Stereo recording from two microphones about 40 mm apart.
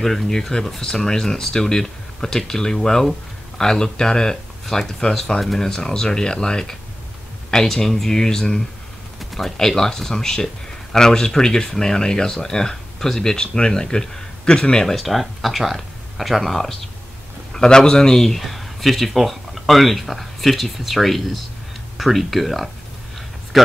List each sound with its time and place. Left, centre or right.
0.0 s speech: centre
5.7 s speech: centre
15.0 s speech: centre
17.6 s speech: centre